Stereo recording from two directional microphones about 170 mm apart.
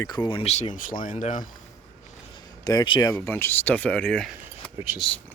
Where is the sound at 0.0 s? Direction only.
25° left (ahead or behind); by 1.5 s 45° left (ahead or behind).